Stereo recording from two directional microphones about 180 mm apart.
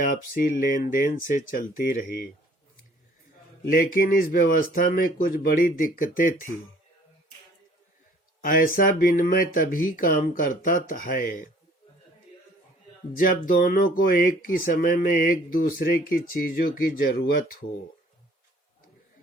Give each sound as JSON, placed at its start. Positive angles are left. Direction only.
{"t": 0.0, "sound": "speech", "side_deg": 50}
{"t": 3.7, "sound": "speech", "side_deg": 55}
{"t": 8.4, "sound": "speech", "side_deg": 50}
{"t": 13.1, "sound": "speech", "side_deg": 50}